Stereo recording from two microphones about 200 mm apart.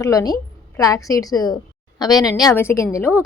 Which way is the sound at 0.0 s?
15° left (ahead or behind).